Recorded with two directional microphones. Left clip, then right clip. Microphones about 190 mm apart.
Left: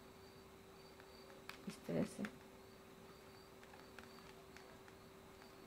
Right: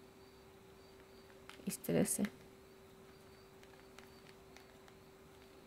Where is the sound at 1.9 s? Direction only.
40° right (ahead or behind).